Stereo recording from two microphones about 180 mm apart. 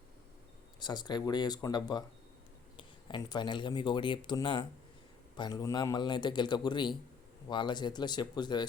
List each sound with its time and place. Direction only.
0.8 s a man's voice: 25° left (ahead or behind)